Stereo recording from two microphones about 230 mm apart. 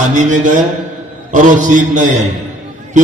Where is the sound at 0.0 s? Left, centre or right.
Right.